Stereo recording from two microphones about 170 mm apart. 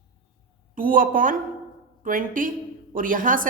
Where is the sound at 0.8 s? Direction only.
55° right (ahead or behind).